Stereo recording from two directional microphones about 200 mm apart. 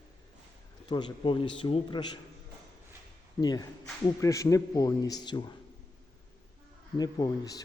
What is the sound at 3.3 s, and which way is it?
A man's voice, 20° left (ahead or behind).